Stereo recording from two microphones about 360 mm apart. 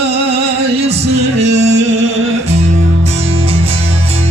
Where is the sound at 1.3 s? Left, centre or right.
Centre.